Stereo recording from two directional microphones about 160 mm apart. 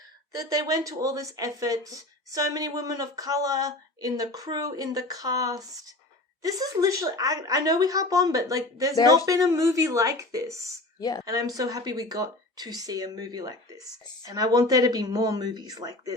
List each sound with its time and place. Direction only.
0.3 s speech: 20° right (ahead or behind)
11.0 s speech: 25° left (ahead or behind)
11.3 s speech: 25° right (ahead or behind)